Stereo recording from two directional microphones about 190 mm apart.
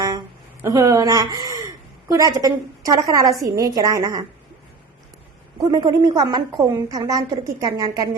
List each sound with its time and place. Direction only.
0.6 s a woman's voice: 15° right (ahead or behind)
5.5 s a woman's voice: 20° right (ahead or behind)